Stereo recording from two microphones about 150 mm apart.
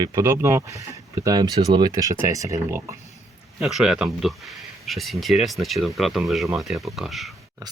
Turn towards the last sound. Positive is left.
turn(degrees=0)  # may be behind; listen again after turning